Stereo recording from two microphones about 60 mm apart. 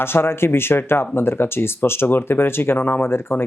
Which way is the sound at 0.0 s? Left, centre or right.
Left.